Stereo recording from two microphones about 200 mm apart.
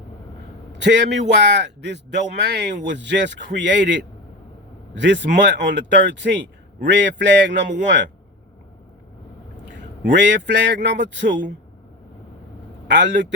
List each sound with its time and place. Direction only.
0.8 s a man's voice: 60° right (ahead or behind)
10.0 s a man's voice: 60° right (ahead or behind)
12.9 s a man's voice: 60° right (ahead or behind)